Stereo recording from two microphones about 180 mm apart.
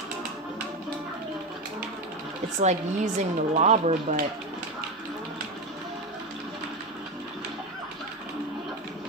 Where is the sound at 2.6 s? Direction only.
40° right (ahead or behind).